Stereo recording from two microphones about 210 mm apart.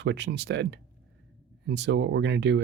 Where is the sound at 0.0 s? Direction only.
55° right (ahead or behind).